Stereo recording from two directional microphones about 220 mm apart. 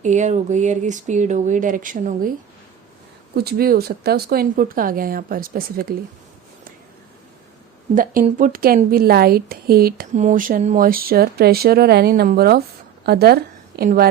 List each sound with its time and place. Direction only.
0.0 s speech: 35° right (ahead or behind)
3.3 s speech: 45° right (ahead or behind)
8.4 s a woman's voice: 40° right (ahead or behind)